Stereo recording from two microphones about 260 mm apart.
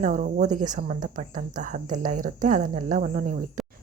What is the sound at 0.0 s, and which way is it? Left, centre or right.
Speech, right.